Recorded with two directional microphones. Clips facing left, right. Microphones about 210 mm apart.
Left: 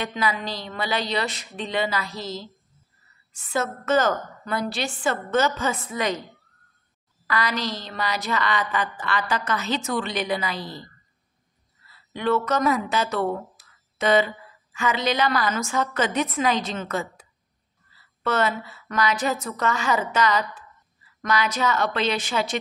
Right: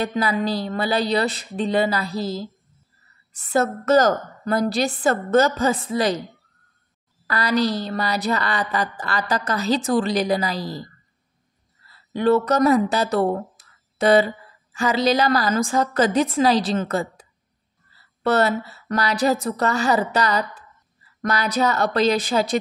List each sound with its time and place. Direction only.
0.0 s a woman's voice: 35° right (ahead or behind)
3.3 s a woman's voice: 40° right (ahead or behind)
7.2 s a woman's voice: 35° right (ahead or behind)
11.9 s a woman's voice: 35° right (ahead or behind)